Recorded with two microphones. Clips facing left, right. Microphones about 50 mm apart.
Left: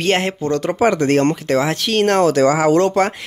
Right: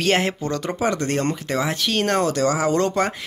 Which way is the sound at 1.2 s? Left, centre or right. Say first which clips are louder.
Left 6 dB; left.